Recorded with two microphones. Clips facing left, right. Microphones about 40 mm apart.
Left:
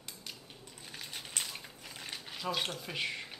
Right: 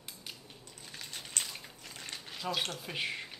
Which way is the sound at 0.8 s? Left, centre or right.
Centre.